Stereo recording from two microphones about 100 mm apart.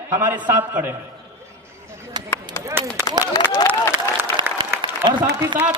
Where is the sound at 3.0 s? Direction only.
35° left (ahead or behind).